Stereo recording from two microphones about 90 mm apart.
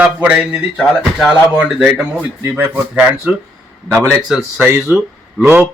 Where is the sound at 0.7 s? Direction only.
5° left (ahead or behind).